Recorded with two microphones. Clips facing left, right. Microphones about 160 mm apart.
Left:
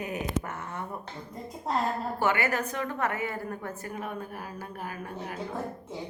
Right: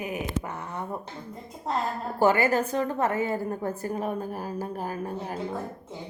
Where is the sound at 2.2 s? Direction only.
30° right (ahead or behind).